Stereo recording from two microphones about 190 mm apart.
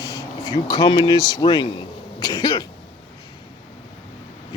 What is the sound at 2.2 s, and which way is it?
Cough, 20° left (ahead or behind).